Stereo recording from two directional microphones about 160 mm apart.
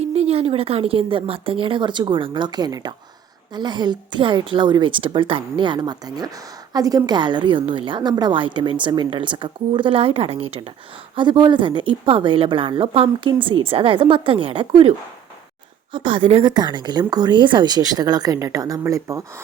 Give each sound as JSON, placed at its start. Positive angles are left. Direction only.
{"t": 0.0, "sound": "a woman's voice", "side_deg": -40}